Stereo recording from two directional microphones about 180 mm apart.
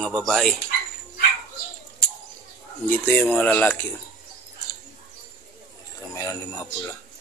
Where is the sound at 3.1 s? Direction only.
10° left (ahead or behind).